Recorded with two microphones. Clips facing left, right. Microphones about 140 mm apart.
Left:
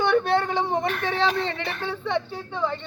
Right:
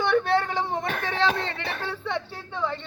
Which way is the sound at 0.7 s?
Centre (ahead or behind).